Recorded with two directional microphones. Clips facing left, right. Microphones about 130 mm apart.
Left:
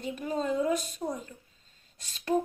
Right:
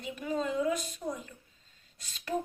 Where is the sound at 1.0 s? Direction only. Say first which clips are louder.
Left 3 dB; 50° left (ahead or behind).